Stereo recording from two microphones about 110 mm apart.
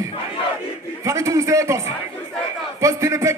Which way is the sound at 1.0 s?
30° right (ahead or behind).